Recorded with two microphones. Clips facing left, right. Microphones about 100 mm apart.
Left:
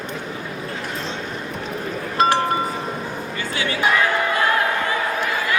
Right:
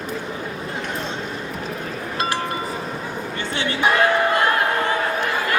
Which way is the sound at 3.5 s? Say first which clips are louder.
Even; 30° right (ahead or behind).